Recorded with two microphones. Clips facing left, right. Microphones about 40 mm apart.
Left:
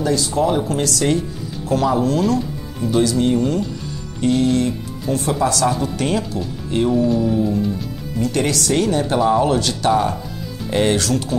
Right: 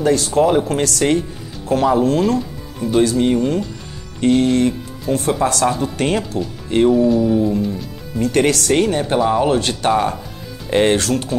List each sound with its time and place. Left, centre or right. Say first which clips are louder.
0.0 s speech: right 3 dB; right
5.4 s speech: right 1 dB; right
6.9 s speech: right 2 dB; centre
8.2 s speech: right 4 dB; right